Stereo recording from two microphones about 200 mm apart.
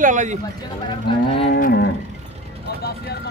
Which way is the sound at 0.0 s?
40° right (ahead or behind).